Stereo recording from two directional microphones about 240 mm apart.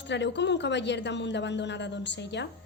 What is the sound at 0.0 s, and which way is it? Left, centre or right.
A woman's voice, left.